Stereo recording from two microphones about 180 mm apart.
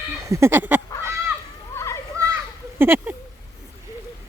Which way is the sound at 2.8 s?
15° right (ahead or behind).